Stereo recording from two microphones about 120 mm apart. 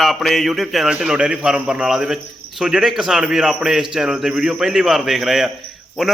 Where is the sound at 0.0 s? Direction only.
Centre (ahead or behind).